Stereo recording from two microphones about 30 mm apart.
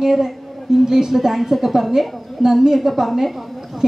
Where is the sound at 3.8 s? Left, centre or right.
Centre.